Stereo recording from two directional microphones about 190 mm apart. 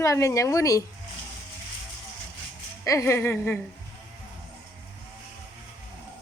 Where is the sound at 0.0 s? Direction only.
15° left (ahead or behind).